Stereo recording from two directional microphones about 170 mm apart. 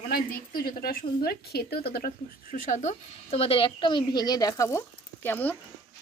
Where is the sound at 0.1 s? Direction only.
60° left (ahead or behind).